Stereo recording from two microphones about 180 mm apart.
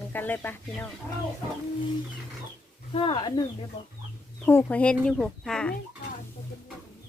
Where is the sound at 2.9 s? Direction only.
30° left (ahead or behind).